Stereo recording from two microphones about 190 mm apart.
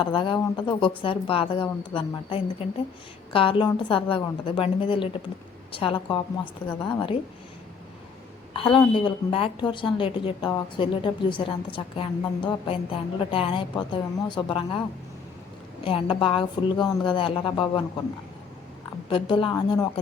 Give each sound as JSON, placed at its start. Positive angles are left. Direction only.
{"t": 0.0, "sound": "a woman's voice", "side_deg": 25}
{"t": 8.6, "sound": "a woman's voice", "side_deg": 25}
{"t": 15.8, "sound": "a woman's voice", "side_deg": 30}
{"t": 19.0, "sound": "a woman's voice", "side_deg": 25}